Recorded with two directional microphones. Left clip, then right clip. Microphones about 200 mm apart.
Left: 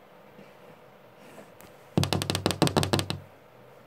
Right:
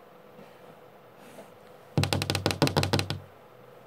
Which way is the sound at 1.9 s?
10° left (ahead or behind).